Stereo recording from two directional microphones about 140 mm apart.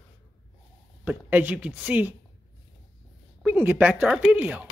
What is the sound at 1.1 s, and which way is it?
Speech, 10° right (ahead or behind).